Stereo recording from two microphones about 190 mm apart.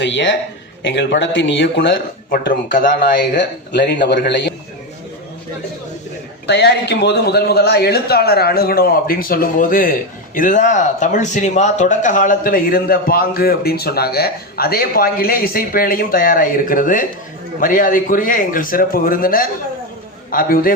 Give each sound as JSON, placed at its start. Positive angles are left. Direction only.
{"t": 0.0, "sound": "speech", "side_deg": 75}
{"t": 2.3, "sound": "speech", "side_deg": 50}
{"t": 3.3, "sound": "a man's voice", "side_deg": 65}
{"t": 6.5, "sound": "a man's voice", "side_deg": 60}